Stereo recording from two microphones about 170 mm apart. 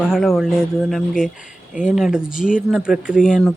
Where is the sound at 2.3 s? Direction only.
50° left (ahead or behind).